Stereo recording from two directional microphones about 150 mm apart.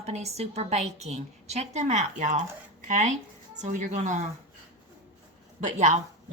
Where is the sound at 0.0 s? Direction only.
45° right (ahead or behind).